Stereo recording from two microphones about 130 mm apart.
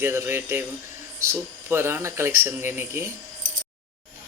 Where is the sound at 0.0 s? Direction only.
20° right (ahead or behind).